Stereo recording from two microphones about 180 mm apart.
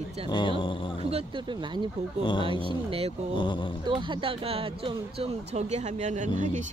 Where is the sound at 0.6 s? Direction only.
30° left (ahead or behind).